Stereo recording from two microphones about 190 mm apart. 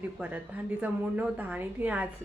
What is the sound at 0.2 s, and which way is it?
A woman's voice, 5° right (ahead or behind).